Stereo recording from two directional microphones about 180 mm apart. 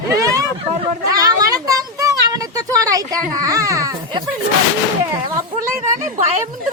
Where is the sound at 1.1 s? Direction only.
20° right (ahead or behind).